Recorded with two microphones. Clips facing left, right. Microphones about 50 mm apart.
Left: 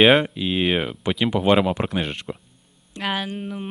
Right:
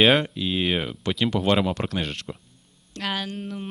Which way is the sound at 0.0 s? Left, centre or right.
Centre.